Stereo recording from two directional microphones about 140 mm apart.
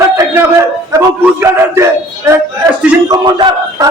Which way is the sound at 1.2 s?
20° right (ahead or behind).